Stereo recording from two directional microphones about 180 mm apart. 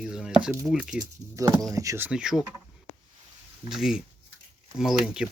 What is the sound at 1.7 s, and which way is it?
Speech, 20° right (ahead or behind).